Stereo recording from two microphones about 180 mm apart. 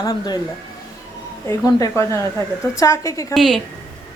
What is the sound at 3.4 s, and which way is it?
Speech, centre (ahead or behind).